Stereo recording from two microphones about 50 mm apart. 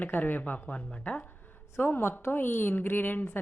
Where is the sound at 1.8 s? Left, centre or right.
Left.